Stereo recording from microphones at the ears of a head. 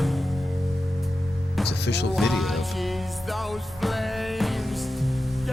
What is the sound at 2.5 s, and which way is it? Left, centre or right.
Music, centre.